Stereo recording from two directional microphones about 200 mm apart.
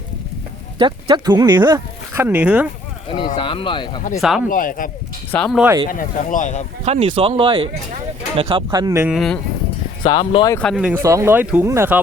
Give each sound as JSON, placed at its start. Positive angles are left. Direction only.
{"t": 0.8, "sound": "speech", "side_deg": -20}
{"t": 3.3, "sound": "speech", "side_deg": 25}
{"t": 4.2, "sound": "speech", "side_deg": 0}
{"t": 4.4, "sound": "speech", "side_deg": 45}
{"t": 5.3, "sound": "speech", "side_deg": 5}
{"t": 5.9, "sound": "speech", "side_deg": 40}
{"t": 6.8, "sound": "speech", "side_deg": -30}
{"t": 9.1, "sound": "speech", "side_deg": 0}
{"t": 10.0, "sound": "speech", "side_deg": 25}
{"t": 10.5, "sound": "speech", "side_deg": 5}